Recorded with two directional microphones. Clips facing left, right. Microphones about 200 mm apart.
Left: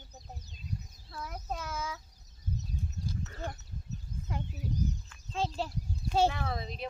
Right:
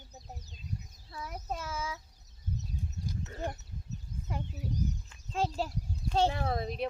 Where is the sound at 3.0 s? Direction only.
20° right (ahead or behind).